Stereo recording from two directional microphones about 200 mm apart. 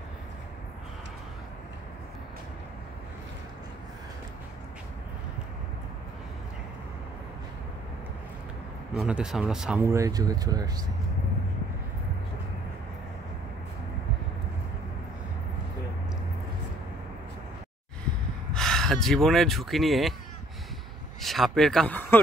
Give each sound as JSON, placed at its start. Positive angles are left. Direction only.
{"t": 8.9, "sound": "speech", "side_deg": -5}
{"t": 9.8, "sound": "speech", "side_deg": -15}
{"t": 18.5, "sound": "speech", "side_deg": 5}
{"t": 21.2, "sound": "speech", "side_deg": 0}